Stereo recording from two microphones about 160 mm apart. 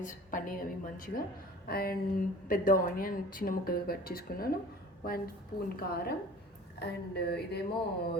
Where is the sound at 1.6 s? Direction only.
70° left (ahead or behind).